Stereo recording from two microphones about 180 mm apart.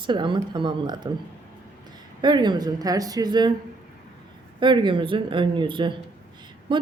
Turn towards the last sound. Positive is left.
turn(degrees=-25)  # may be behind; listen again after turning